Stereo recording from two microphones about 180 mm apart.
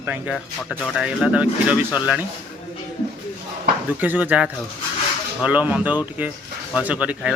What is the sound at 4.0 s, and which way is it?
Speech, 10° right (ahead or behind).